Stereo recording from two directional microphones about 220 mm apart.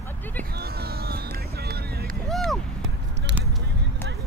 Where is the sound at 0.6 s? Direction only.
45° right (ahead or behind).